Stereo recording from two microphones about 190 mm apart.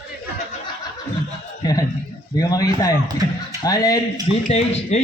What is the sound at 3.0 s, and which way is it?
Speech, 20° right (ahead or behind).